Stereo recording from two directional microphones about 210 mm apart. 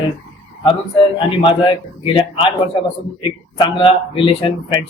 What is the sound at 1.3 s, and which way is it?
Speech, 25° left (ahead or behind).